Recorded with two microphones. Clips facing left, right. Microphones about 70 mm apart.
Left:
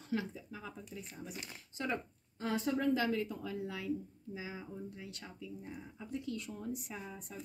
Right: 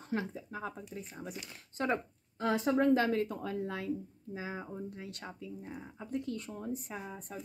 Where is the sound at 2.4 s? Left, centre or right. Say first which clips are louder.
Right 5 dB; right.